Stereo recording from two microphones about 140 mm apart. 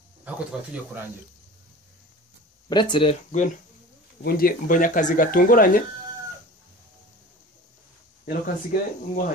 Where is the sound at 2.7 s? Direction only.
35° left (ahead or behind).